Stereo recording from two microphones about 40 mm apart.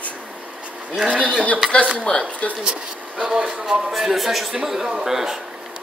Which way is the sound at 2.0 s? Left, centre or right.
Left.